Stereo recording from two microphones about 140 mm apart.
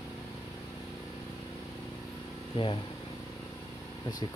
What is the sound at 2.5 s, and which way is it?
Speech, 35° left (ahead or behind).